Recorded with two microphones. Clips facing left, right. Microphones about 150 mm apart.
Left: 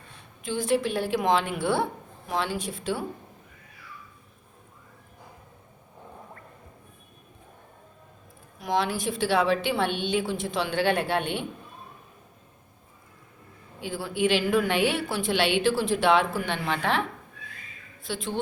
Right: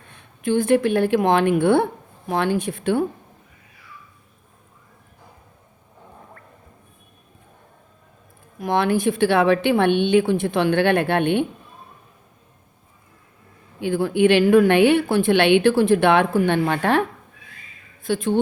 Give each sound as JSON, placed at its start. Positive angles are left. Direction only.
{"t": 0.1, "sound": "a woman's voice", "side_deg": -55}
{"t": 8.5, "sound": "a woman's voice", "side_deg": -55}
{"t": 13.8, "sound": "a woman's voice", "side_deg": -55}